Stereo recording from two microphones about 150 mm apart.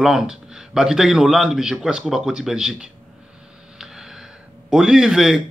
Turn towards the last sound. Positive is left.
turn(degrees=-5)  # may be behind; listen again after turning